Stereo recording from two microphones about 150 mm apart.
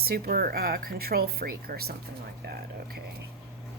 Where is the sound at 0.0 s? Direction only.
90° right.